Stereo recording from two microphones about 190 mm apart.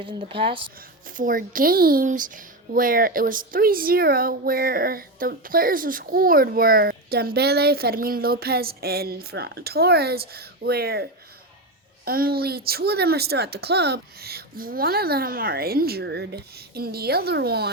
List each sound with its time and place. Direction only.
0.0 s speech: 25° right (ahead or behind)
0.8 s speech: 45° right (ahead or behind)
12.0 s speech: 50° right (ahead or behind)